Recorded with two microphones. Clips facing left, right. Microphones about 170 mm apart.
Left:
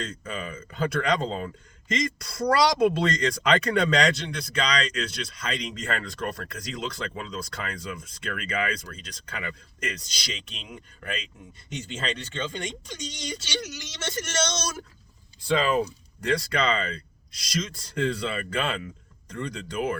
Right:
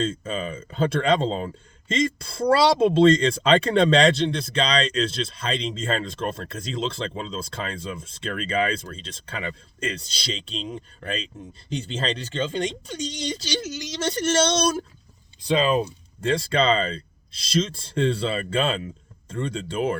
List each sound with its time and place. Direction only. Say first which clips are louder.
0.0 s speech: right 7 dB; 25° right (ahead or behind)
15.4 s speech: right 2 dB; 20° right (ahead or behind)